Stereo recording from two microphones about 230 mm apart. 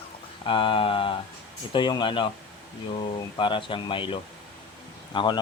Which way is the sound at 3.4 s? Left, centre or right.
Left.